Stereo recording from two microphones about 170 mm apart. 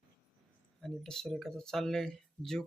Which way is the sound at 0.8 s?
5° left (ahead or behind).